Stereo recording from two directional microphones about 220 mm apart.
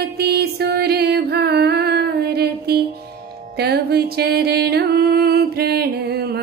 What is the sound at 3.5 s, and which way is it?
Music, 45° right (ahead or behind).